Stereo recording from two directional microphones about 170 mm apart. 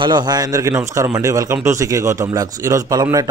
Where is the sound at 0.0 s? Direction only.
25° right (ahead or behind).